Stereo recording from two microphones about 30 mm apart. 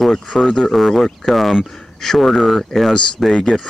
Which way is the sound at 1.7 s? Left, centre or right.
Centre.